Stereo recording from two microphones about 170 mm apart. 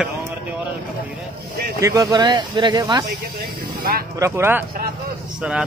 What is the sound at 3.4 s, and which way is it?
Speech, 65° right (ahead or behind).